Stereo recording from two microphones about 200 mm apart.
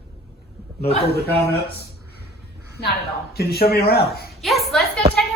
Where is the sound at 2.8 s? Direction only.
50° left (ahead or behind).